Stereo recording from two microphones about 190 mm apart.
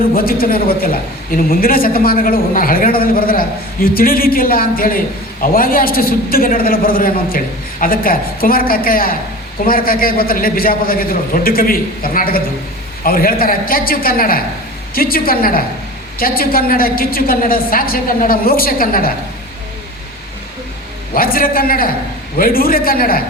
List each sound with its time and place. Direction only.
0.1 s a woman's voice: 50° left (ahead or behind)
21.1 s a woman's voice: 50° left (ahead or behind)